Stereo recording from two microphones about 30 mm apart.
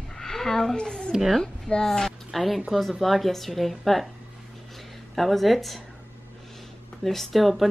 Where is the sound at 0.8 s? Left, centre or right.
Left.